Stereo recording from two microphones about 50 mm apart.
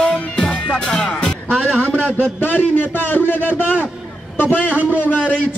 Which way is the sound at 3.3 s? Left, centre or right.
Left.